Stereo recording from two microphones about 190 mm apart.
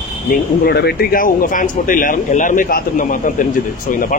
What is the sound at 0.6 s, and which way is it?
Speech, 55° left (ahead or behind).